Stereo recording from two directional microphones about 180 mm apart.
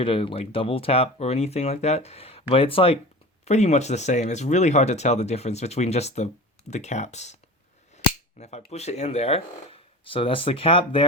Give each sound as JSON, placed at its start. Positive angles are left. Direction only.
{"t": 0.0, "sound": "speech", "side_deg": 30}